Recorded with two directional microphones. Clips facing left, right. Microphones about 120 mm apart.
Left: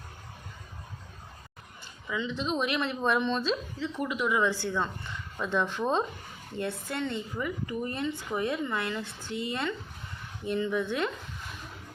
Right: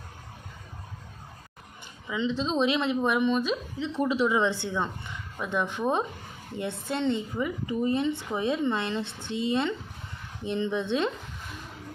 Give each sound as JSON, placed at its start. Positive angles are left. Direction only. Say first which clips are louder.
{"t": 2.0, "sound": "a woman's voice", "louder": "right 3 dB", "side_deg": -20}